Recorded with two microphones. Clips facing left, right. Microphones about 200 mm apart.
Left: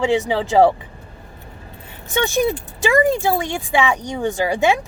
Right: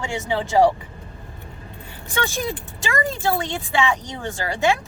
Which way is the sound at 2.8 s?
15° left (ahead or behind).